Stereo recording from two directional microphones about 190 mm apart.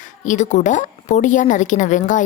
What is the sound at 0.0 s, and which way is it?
A woman's voice, 40° left (ahead or behind).